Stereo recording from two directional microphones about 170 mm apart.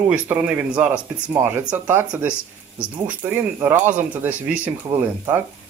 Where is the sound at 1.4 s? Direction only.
20° right (ahead or behind).